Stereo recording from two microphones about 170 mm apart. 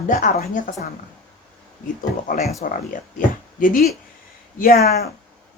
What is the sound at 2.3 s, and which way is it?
Speech, 50° left (ahead or behind).